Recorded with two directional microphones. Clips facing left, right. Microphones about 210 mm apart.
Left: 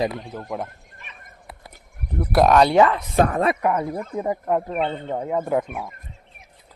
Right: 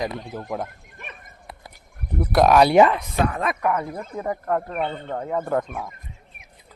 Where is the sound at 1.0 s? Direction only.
55° right (ahead or behind).